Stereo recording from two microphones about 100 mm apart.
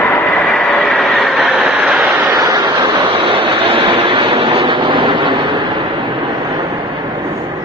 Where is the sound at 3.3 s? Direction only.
60° right (ahead or behind).